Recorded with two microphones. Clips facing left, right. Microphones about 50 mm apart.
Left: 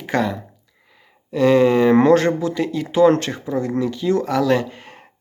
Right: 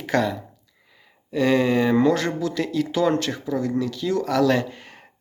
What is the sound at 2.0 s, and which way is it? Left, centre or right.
Speech, left.